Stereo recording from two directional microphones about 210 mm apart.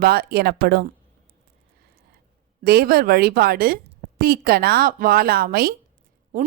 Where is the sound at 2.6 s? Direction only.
50° right (ahead or behind).